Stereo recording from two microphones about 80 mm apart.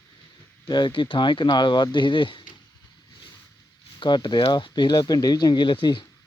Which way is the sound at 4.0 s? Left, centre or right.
Left.